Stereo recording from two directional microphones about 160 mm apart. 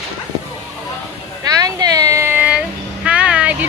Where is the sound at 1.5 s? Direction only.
20° right (ahead or behind).